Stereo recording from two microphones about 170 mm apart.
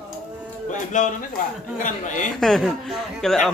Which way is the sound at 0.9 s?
45° left (ahead or behind).